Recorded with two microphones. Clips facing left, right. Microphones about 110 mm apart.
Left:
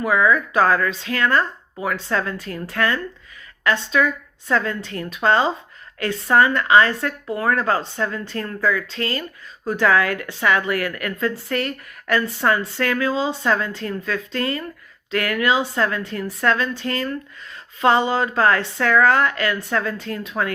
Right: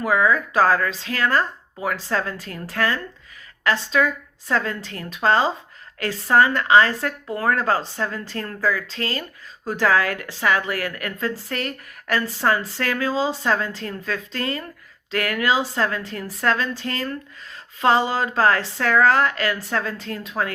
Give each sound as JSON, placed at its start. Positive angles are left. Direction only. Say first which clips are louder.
{"t": 0.0, "sound": "a woman's voice", "louder": "left 1 dB", "side_deg": -35}
{"t": 17.5, "sound": "a sound", "louder": "left 1 dB", "side_deg": -30}
{"t": 18.2, "sound": "a woman's voice", "louder": "left 1 dB", "side_deg": -35}